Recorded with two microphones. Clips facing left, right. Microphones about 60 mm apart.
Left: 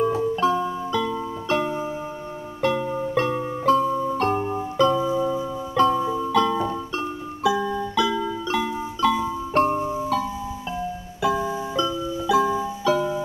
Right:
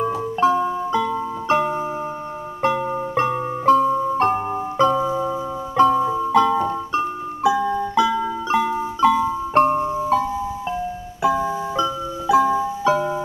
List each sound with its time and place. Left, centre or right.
0.1 s music: right
11.2 s keyboard: right